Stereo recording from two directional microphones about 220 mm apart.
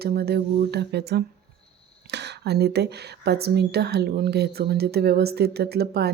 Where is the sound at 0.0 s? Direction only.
45° right (ahead or behind).